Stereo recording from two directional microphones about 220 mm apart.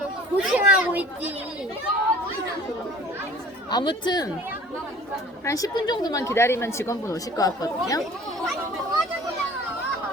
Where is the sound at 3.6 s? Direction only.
20° left (ahead or behind).